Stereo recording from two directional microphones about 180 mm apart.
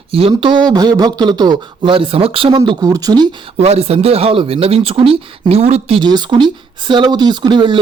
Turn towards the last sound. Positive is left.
turn(degrees=-25)  # may be behind; listen again after turning